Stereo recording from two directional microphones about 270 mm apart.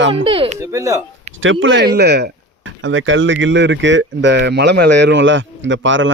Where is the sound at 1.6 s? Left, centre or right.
Right.